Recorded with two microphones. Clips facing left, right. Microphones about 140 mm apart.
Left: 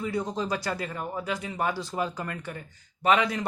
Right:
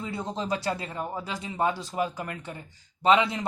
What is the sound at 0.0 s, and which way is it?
Speech, 25° right (ahead or behind).